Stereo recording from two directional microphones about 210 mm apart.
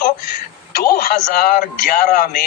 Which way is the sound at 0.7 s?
45° left (ahead or behind).